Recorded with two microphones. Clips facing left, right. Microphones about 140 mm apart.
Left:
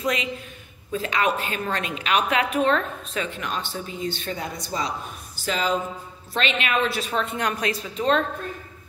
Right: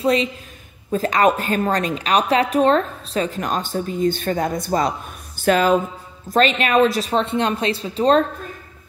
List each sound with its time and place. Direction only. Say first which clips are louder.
0.0 s a woman's voice: right 8 dB; 30° right (ahead or behind)
0.9 s a woman's voice: right 7 dB; 45° right (ahead or behind)
6.2 s a woman's voice: right 8 dB; 45° right (ahead or behind)